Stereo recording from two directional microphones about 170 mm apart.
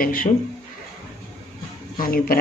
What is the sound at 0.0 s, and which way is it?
Speech, 55° left (ahead or behind).